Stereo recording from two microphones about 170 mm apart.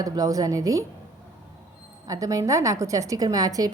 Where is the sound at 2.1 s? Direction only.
20° right (ahead or behind).